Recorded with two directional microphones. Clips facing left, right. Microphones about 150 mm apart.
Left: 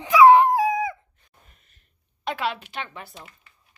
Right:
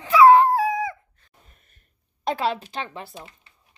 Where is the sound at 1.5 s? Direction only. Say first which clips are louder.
Right 2 dB; 45° right (ahead or behind); by 3.5 s 25° right (ahead or behind).